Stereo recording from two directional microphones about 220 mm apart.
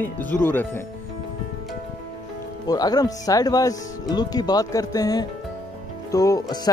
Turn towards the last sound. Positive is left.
turn(degrees=15)  # may be behind; listen again after turning